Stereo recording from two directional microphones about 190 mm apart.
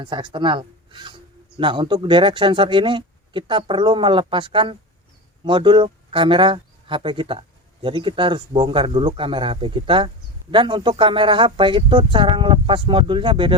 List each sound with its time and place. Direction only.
0.0 s speech: 25° right (ahead or behind)